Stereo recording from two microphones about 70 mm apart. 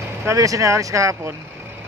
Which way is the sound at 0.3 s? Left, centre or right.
Right.